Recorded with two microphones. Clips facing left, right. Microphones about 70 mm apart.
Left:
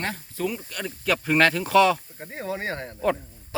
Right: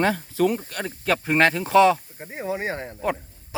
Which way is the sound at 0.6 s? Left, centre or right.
Right.